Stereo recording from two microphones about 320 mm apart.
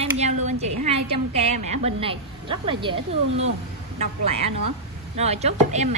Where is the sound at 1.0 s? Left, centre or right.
Right.